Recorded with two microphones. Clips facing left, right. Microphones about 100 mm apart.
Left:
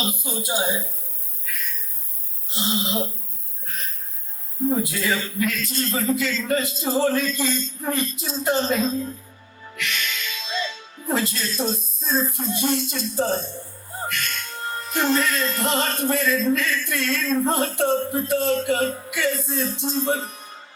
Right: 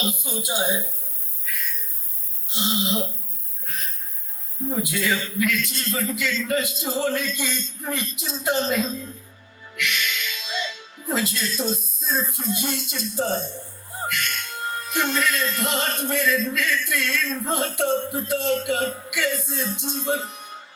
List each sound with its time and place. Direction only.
0.1 s music: 35° left (ahead or behind)
2.5 s music: 35° left (ahead or behind)
4.8 s music: 35° left (ahead or behind)
9.7 s speech: 35° left (ahead or behind)
14.1 s music: 35° left (ahead or behind)